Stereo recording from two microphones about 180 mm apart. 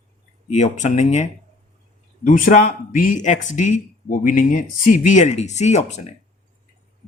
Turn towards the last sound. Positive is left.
turn(degrees=40)  # may be behind; listen again after turning